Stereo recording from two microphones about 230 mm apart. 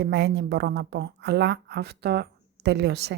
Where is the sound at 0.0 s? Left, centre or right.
Right.